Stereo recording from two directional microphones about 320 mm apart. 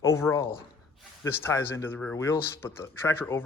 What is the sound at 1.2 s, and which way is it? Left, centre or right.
Speech, centre.